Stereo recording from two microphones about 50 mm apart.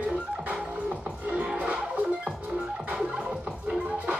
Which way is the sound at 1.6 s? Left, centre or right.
Right.